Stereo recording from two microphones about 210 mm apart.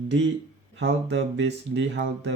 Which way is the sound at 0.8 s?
60° right (ahead or behind).